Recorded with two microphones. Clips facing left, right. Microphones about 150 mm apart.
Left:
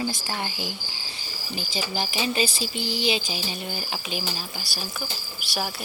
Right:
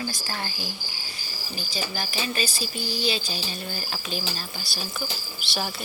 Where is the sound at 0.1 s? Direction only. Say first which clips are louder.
Left 2 dB; 20° left (ahead or behind).